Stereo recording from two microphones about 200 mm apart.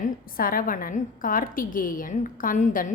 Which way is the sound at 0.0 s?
45° left (ahead or behind).